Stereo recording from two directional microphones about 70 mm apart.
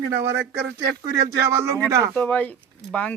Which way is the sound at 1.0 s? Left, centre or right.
Right.